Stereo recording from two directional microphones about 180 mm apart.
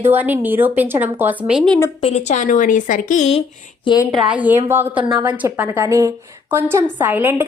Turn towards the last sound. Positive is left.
turn(degrees=-10)  # may be behind; listen again after turning